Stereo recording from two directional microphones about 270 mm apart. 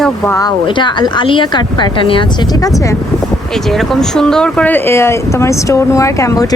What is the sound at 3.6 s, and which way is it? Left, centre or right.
Speech, centre.